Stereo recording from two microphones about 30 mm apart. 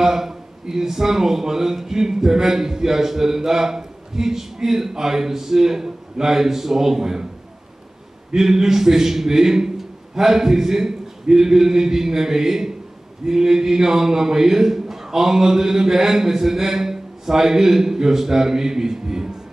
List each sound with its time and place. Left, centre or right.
0.0 s a man's voice: centre
8.4 s a man's voice: centre